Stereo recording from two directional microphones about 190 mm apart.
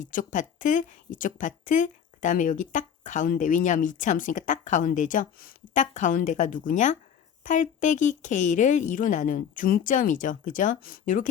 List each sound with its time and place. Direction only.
0.0 s a woman's voice: 45° left (ahead or behind)